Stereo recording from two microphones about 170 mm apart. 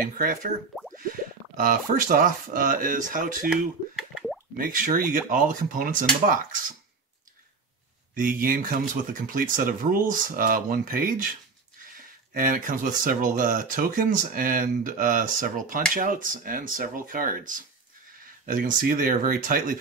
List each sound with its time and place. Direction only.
0.2 s speech: 55° right (ahead or behind)
1.6 s speech: 55° right (ahead or behind)
3.4 s a sound: centre (ahead or behind)
4.6 s speech: 55° right (ahead or behind)
8.1 s speech: 55° right (ahead or behind)
12.4 s speech: 50° right (ahead or behind)